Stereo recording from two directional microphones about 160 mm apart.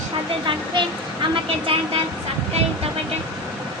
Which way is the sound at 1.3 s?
35° right (ahead or behind).